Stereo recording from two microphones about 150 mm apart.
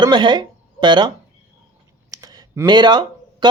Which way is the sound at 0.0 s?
30° right (ahead or behind).